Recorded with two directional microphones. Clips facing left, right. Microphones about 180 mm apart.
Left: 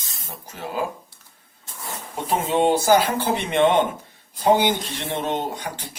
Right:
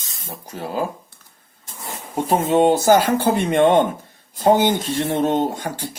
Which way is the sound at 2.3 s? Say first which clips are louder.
Right 4 dB; 45° right (ahead or behind).